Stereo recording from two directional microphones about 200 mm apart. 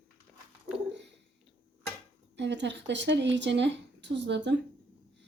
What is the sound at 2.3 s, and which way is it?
Speech, 60° right (ahead or behind).